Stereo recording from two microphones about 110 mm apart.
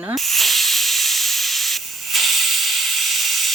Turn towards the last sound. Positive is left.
turn(degrees=0)  # may be behind; listen again after turning